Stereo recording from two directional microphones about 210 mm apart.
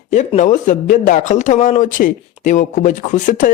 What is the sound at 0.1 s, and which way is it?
Speech, 35° left (ahead or behind).